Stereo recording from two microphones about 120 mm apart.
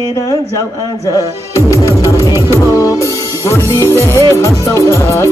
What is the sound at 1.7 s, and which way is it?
Music, 25° left (ahead or behind).